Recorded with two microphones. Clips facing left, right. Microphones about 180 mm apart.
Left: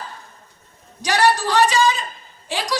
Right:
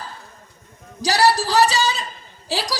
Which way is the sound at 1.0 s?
35° right (ahead or behind).